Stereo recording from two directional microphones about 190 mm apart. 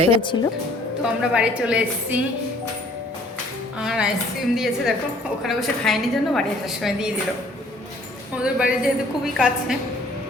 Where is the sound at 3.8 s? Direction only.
5° right (ahead or behind).